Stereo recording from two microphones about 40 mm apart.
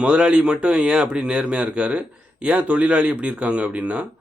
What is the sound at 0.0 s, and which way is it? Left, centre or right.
Speech, right.